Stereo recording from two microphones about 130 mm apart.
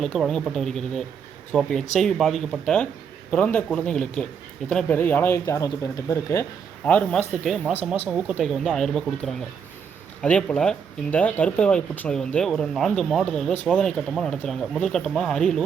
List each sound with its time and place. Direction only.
0.0 s speech: 5° left (ahead or behind); by 6.4 s 25° left (ahead or behind)
6.8 s speech: 10° left (ahead or behind)
7.7 s speech: 15° right (ahead or behind)
8.4 s speech: centre (ahead or behind)